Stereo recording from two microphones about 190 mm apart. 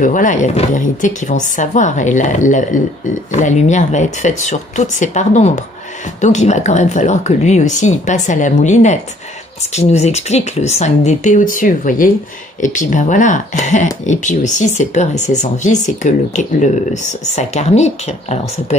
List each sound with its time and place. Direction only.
0.0 s speech: 40° left (ahead or behind)